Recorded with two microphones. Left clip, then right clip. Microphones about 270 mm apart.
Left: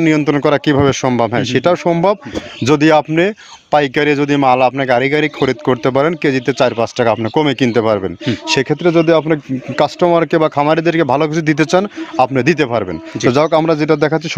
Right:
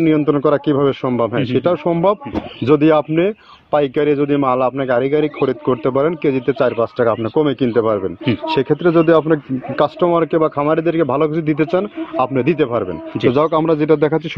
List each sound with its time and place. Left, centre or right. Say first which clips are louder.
0.0 s a man's voice: left 1 dB; left